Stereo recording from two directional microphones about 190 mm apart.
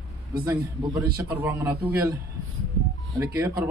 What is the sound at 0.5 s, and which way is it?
Speech, 20° right (ahead or behind).